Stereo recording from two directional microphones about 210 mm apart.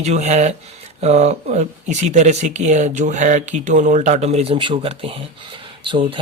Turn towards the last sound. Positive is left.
turn(degrees=-25)  # may be behind; listen again after turning